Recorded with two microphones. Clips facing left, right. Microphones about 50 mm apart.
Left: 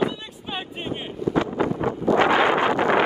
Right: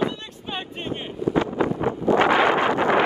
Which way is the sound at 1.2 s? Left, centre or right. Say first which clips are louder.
Right 1 dB; right.